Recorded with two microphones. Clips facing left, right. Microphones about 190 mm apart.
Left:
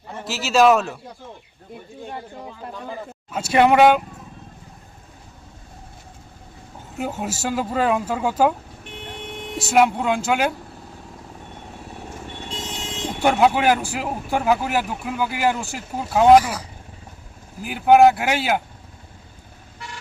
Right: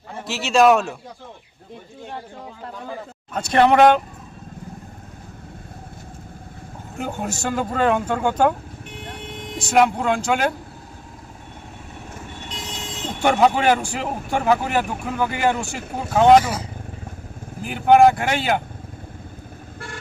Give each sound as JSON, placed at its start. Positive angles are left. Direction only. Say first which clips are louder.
{"t": 0.3, "sound": "speech", "louder": "even", "side_deg": 0}
{"t": 3.3, "sound": "speech", "louder": "even", "side_deg": 5}
{"t": 6.9, "sound": "speech", "louder": "even", "side_deg": 5}
{"t": 9.6, "sound": "speech", "louder": "even", "side_deg": 5}
{"t": 13.2, "sound": "speech", "louder": "even", "side_deg": 5}
{"t": 17.6, "sound": "speech", "louder": "even", "side_deg": 5}